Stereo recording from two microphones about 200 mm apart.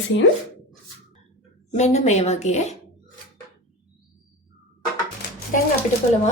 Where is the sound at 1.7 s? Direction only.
35° left (ahead or behind).